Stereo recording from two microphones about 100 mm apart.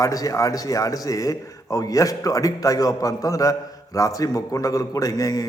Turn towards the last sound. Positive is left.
turn(degrees=40)  # may be behind; listen again after turning